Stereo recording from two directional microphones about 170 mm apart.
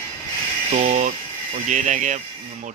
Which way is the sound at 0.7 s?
45° right (ahead or behind).